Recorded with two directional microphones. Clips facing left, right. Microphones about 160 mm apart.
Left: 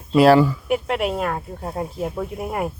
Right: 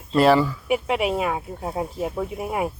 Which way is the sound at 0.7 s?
5° right (ahead or behind).